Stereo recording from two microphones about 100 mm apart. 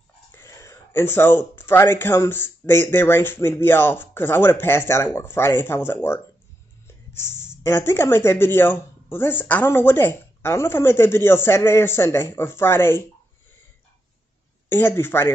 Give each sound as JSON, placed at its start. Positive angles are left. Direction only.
{"t": 0.3, "sound": "speech", "side_deg": 25}
{"t": 14.7, "sound": "speech", "side_deg": 25}